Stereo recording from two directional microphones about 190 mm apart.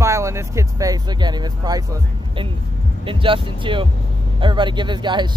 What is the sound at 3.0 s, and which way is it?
Speech, 25° right (ahead or behind).